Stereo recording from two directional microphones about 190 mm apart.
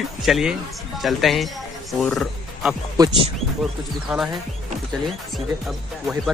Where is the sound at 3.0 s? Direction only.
25° right (ahead or behind).